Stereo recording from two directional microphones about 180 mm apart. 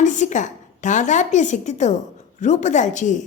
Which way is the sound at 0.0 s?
40° left (ahead or behind).